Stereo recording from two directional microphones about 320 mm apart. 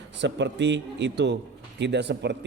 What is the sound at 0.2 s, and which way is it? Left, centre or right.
Speech, right.